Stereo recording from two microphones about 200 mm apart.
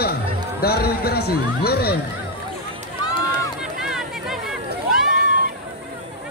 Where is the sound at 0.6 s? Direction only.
50° left (ahead or behind).